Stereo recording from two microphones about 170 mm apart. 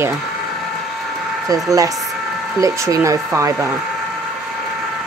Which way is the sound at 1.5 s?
20° right (ahead or behind).